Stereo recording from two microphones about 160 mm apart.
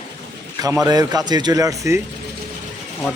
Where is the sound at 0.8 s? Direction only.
25° right (ahead or behind).